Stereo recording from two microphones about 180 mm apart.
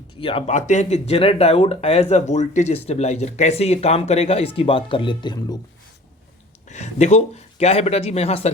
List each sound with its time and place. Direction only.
0.2 s speech: 30° left (ahead or behind)
0.5 s speech: 40° left (ahead or behind); by 5.5 s 25° left (ahead or behind)
6.7 s speech: 40° left (ahead or behind)